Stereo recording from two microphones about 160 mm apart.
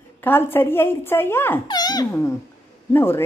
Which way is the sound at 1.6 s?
25° left (ahead or behind).